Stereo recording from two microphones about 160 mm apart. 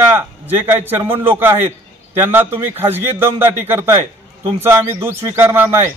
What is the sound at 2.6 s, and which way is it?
Speech, 15° right (ahead or behind).